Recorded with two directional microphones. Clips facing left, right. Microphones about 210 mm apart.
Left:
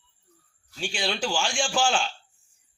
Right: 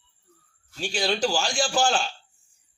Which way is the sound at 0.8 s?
40° right (ahead or behind).